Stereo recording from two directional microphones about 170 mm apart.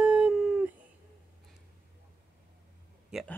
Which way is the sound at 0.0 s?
5° right (ahead or behind).